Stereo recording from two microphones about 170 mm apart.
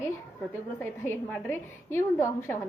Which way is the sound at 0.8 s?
10° left (ahead or behind).